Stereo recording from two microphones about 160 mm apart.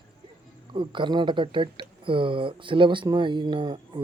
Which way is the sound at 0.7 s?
30° right (ahead or behind).